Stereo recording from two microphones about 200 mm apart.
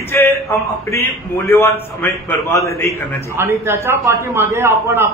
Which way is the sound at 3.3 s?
10° right (ahead or behind).